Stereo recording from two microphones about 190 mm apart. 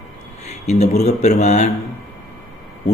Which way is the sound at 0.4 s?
35° left (ahead or behind).